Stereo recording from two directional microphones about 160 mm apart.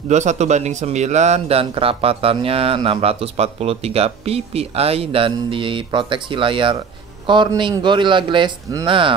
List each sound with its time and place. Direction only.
0.1 s a man's voice: 45° right (ahead or behind); by 9.1 s 30° right (ahead or behind)